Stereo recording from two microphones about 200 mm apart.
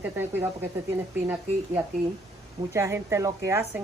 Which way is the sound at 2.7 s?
15° right (ahead or behind).